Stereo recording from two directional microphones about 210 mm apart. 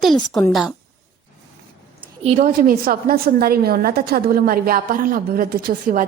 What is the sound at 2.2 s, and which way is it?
A woman's voice, 35° right (ahead or behind).